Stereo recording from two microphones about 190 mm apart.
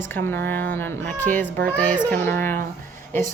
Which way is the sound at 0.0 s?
10° left (ahead or behind).